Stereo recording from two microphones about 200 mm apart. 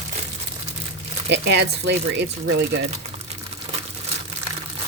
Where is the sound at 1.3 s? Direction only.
60° right (ahead or behind).